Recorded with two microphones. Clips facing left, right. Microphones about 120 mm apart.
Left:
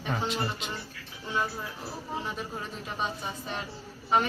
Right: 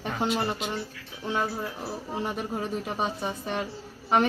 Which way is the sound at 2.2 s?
55° right (ahead or behind).